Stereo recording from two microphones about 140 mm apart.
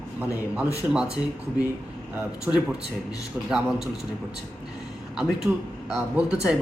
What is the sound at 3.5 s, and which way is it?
Speech, 5° right (ahead or behind).